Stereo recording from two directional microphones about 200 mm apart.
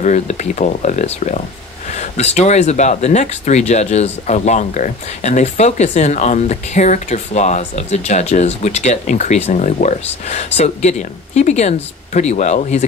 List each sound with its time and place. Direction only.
0.0 s speech: 35° left (ahead or behind)